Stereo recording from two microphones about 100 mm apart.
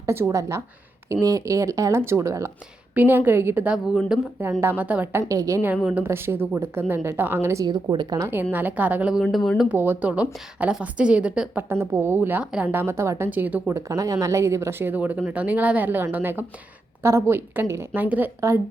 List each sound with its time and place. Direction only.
0.0 s speech: 25° right (ahead or behind)
2.9 s a woman's voice: 20° right (ahead or behind)
4.6 s a woman's voice: 15° right (ahead or behind)
5.3 s speech: 35° right (ahead or behind)
5.6 s speech: 15° right (ahead or behind)
7.6 s speech: 45° right (ahead or behind)
8.3 s a woman's voice: 20° right (ahead or behind)
9.3 s speech: centre (ahead or behind)
9.6 s a woman's voice: 20° right (ahead or behind)
12.7 s speech: 25° right (ahead or behind)
13.8 s speech: 35° right (ahead or behind); by 18.3 s 20° right (ahead or behind)
18.3 s speech: 30° right (ahead or behind)